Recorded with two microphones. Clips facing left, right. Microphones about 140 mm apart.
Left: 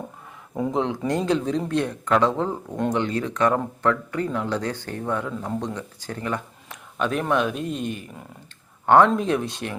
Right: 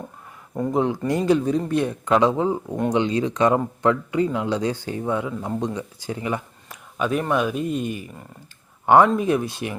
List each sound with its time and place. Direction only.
0.7 s speech: 5° right (ahead or behind)